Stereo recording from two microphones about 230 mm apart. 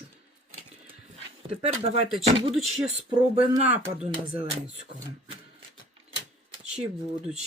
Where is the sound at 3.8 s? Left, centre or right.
Right.